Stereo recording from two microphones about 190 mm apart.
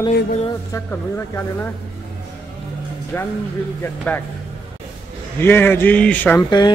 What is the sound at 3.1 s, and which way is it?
Speech, 10° left (ahead or behind).